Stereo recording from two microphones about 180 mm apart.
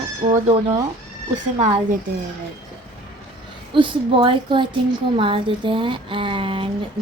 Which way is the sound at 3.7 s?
30° right (ahead or behind).